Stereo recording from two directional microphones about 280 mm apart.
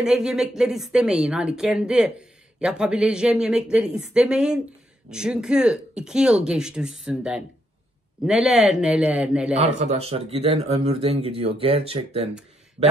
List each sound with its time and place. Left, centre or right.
0.0 s speech: centre
9.6 s speech: right